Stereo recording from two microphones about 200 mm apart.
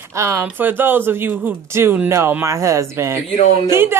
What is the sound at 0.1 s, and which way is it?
Speech, 15° right (ahead or behind).